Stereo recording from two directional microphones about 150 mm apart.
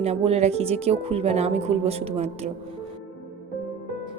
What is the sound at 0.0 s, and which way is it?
Speech, 45° right (ahead or behind).